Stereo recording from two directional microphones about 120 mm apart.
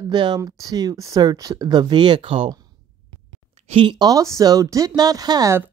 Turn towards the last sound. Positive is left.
turn(degrees=-35)  # may be behind; listen again after turning